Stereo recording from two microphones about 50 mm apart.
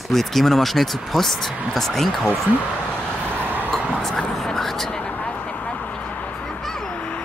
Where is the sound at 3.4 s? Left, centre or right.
Right.